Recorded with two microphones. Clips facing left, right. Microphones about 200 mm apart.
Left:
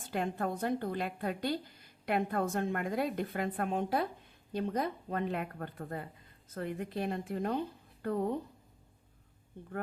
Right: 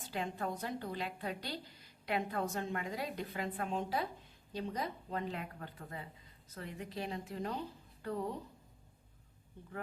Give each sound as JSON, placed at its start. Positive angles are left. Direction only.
{"t": 0.0, "sound": "a woman's voice", "side_deg": 55}